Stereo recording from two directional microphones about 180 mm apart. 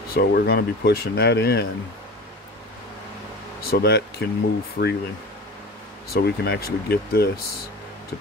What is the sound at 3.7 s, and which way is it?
Speech, 65° left (ahead or behind).